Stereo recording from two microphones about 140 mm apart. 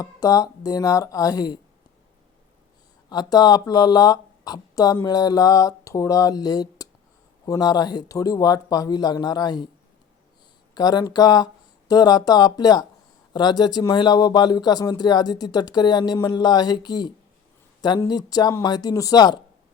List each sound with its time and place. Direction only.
0.0 s speech: 25° left (ahead or behind)
3.1 s speech: 30° left (ahead or behind)
10.8 s speech: 30° left (ahead or behind)
18.1 s speech: 30° left (ahead or behind)